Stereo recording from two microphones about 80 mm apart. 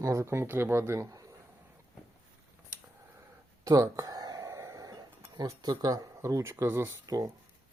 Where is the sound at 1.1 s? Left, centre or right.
Right.